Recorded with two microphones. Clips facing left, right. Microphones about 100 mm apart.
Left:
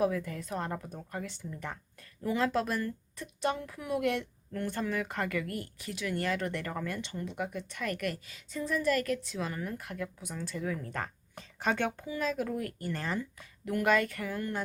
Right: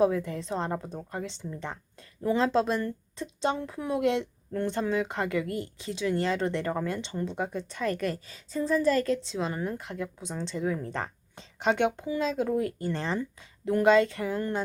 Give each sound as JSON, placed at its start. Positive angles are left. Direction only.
{"t": 0.0, "sound": "speech", "side_deg": -25}